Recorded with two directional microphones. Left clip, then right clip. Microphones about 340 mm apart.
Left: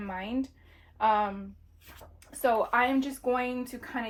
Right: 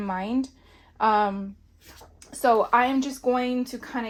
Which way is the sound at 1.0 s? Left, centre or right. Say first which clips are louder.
Right 4 dB; right.